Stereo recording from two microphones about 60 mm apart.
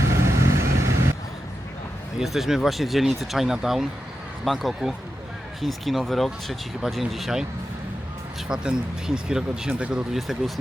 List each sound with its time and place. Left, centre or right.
0.1 s vehicle: right
2.1 s speech: centre
8.4 s speech: centre
10.1 s speech: centre